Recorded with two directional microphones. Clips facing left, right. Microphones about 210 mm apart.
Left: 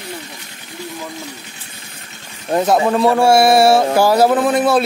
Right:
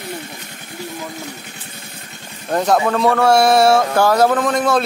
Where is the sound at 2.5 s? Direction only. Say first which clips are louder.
Left 2 dB; 5° left (ahead or behind).